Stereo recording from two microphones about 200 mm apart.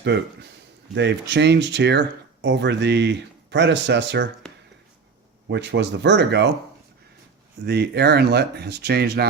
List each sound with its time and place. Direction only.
0.9 s speech: 60° right (ahead or behind)
5.5 s speech: 60° right (ahead or behind)
7.6 s speech: 55° right (ahead or behind)